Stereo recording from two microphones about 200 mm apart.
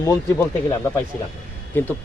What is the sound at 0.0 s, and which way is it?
Speech, 15° left (ahead or behind).